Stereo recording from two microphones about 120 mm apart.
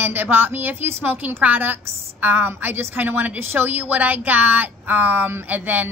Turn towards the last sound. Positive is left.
turn(degrees=-15)  # may be behind; listen again after turning